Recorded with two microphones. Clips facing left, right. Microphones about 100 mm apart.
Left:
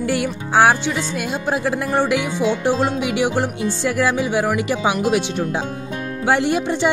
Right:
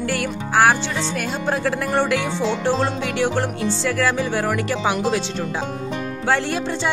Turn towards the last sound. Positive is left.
turn(degrees=15)  # may be behind; listen again after turning